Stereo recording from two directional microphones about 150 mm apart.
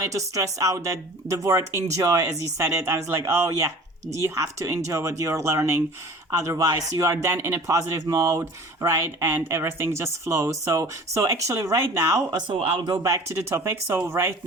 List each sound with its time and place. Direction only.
0.0 s speech: 20° right (ahead or behind)
12.4 s speech: 30° right (ahead or behind); by 14.3 s 15° right (ahead or behind)